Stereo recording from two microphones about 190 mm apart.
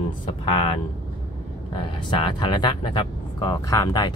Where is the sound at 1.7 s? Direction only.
25° left (ahead or behind).